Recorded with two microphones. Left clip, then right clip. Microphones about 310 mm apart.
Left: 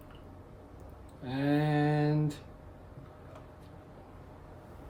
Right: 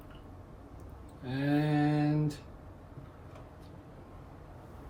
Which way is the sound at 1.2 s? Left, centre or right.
Left.